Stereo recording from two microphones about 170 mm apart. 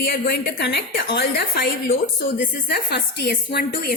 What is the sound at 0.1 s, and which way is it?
A woman's voice, 65° left (ahead or behind).